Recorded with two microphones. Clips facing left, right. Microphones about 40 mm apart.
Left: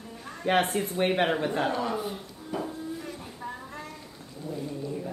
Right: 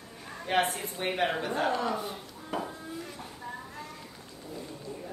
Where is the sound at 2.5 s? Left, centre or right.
Right.